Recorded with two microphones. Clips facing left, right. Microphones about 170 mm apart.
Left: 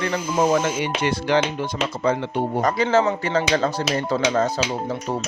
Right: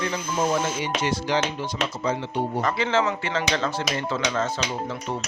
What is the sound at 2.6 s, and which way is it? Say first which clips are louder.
Speech: left 6 dB; 40° left (ahead or behind).